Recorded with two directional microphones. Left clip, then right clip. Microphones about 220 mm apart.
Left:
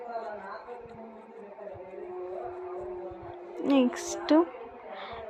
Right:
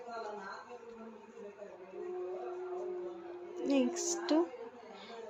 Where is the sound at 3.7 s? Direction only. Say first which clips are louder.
Left 7 dB; 25° left (ahead or behind).